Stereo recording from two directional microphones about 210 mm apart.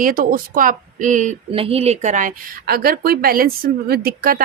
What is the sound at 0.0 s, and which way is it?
Speech, 40° right (ahead or behind).